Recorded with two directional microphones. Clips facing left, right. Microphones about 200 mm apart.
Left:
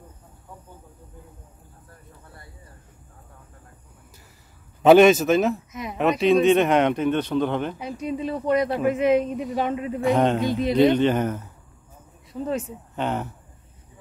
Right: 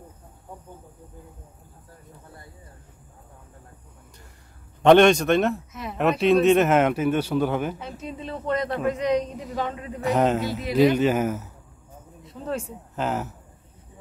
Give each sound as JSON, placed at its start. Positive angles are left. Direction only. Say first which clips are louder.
{"t": 4.8, "sound": "speech", "louder": "left 2 dB", "side_deg": 5}
{"t": 8.0, "sound": "speech", "louder": "left 12 dB", "side_deg": 15}
{"t": 8.3, "sound": "speech", "louder": "left 3 dB", "side_deg": 5}
{"t": 9.4, "sound": "speech", "louder": "left 5 dB", "side_deg": 15}
{"t": 10.1, "sound": "speech", "louder": "even", "side_deg": -5}